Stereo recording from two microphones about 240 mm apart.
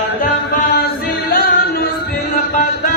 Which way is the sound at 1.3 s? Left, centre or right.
Left.